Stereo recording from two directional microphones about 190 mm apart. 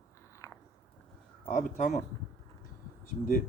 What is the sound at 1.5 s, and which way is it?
Speech, 45° left (ahead or behind).